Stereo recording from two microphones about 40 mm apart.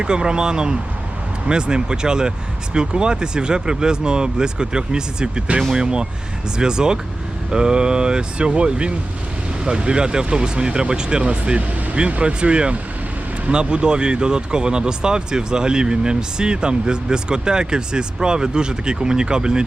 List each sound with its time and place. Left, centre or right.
0.0 s speech: right